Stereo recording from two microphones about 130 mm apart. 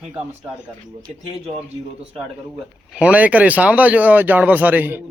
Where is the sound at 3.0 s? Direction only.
10° right (ahead or behind).